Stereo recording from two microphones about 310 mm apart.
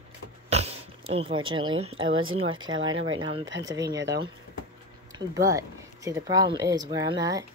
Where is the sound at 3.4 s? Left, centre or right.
Right.